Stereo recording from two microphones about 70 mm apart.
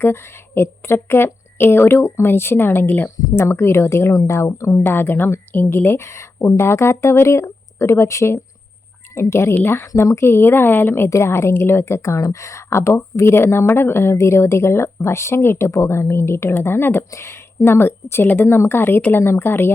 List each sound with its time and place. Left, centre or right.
0.0 s a woman's voice: left